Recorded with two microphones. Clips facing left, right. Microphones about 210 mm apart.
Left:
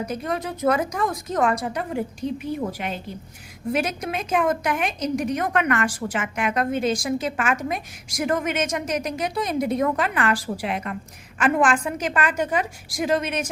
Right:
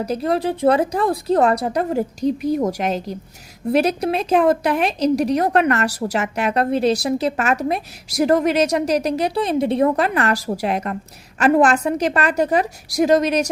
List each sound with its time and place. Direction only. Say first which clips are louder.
0.0 s a woman's voice: right 7 dB; 35° right (ahead or behind)